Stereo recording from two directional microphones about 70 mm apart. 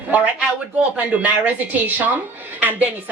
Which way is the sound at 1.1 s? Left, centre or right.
Right.